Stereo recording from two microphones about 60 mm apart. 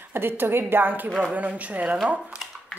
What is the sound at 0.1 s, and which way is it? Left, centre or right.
Speech, right.